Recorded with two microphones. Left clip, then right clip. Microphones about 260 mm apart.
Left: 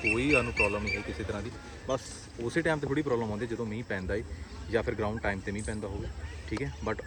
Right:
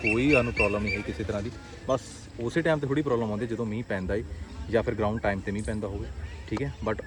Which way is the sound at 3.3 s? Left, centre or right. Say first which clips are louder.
Right 3 dB; right.